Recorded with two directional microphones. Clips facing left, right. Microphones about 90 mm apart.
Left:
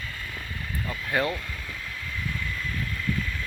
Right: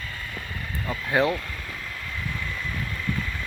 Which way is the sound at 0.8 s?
20° right (ahead or behind).